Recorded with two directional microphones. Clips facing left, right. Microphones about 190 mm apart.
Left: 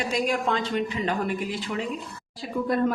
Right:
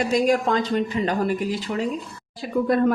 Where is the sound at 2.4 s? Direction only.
65° right (ahead or behind).